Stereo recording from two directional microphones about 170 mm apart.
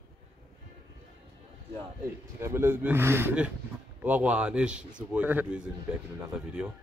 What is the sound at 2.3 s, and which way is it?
A man's voice, 15° right (ahead or behind).